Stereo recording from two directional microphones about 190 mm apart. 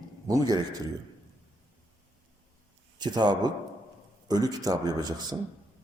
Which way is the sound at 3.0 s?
20° right (ahead or behind).